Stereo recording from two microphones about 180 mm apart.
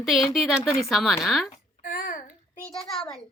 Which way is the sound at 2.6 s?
Centre (ahead or behind).